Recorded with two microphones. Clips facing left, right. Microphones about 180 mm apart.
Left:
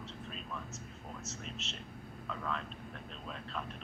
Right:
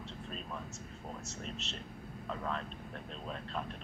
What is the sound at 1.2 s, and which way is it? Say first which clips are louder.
Speech: right 1 dB; 35° right (ahead or behind).